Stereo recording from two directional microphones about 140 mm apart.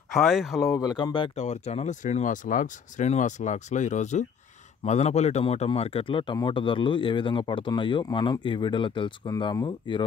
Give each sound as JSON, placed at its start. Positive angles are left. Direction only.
{"t": 0.1, "sound": "speech", "side_deg": 0}
{"t": 0.6, "sound": "speech", "side_deg": 25}
{"t": 1.3, "sound": "speech", "side_deg": 55}